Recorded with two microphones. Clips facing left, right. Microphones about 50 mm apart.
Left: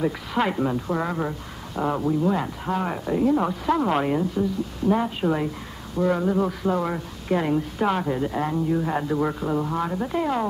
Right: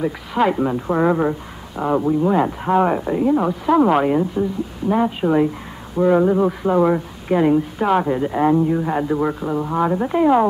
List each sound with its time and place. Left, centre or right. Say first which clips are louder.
0.0 s a man's voice: right 5 dB; centre
0.8 s a man's voice: right 8 dB; right